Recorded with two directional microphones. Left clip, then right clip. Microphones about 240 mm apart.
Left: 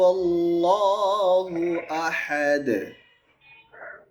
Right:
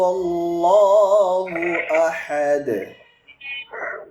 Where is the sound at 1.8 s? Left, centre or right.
Left.